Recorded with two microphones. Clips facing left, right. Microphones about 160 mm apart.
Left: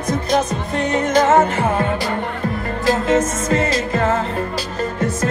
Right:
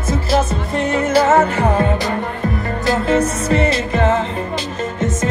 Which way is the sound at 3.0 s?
30° right (ahead or behind).